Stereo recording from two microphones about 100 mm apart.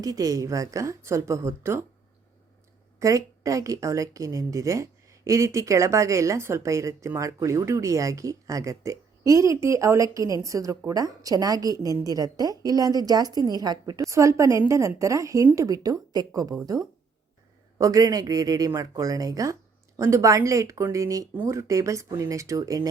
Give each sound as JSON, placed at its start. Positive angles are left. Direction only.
{"t": 0.0, "sound": "a woman's voice", "side_deg": -35}
{"t": 3.0, "sound": "a woman's voice", "side_deg": -35}
{"t": 17.7, "sound": "a woman's voice", "side_deg": -35}